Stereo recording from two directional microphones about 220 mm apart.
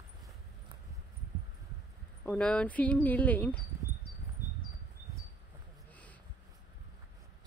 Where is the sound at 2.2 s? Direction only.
5° left (ahead or behind).